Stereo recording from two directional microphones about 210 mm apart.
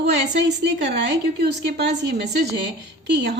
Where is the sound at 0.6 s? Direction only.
55° right (ahead or behind).